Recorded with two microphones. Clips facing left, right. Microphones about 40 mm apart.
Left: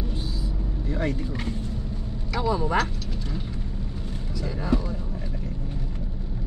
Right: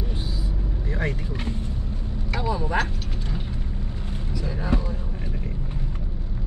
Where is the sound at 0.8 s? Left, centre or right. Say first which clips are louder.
Left 1 dB; right.